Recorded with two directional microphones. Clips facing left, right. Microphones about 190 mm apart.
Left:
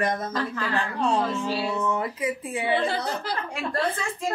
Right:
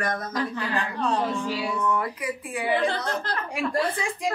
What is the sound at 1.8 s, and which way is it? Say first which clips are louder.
Speech: even; 25° left (ahead or behind).